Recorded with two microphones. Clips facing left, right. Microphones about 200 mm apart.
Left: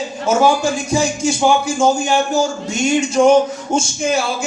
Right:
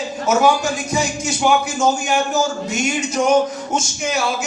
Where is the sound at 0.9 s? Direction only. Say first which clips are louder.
Left 4 dB; 30° left (ahead or behind).